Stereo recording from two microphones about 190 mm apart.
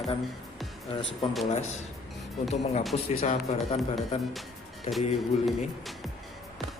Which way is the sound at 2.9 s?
35° left (ahead or behind).